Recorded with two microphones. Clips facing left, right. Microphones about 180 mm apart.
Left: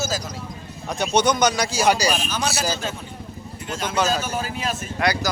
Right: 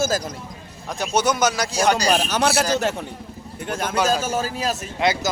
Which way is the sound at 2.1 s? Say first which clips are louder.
Right 4 dB; 70° right (ahead or behind).